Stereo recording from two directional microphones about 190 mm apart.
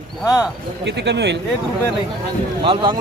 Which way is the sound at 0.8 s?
65° right (ahead or behind).